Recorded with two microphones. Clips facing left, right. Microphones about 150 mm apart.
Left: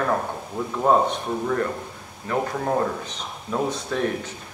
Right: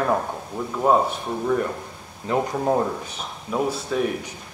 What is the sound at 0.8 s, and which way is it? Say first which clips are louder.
Speech: even; 5° right (ahead or behind).